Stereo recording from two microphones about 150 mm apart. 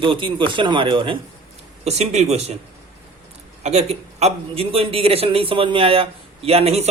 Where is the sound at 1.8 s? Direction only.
45° right (ahead or behind).